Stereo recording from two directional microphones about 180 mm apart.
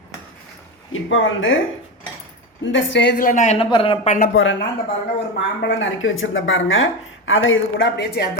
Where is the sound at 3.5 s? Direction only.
30° left (ahead or behind).